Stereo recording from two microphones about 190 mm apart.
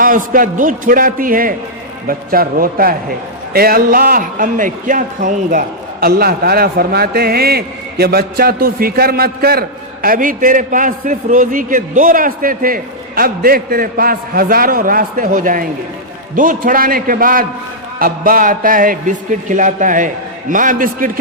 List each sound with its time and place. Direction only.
0.0 s a man's voice: 45° right (ahead or behind)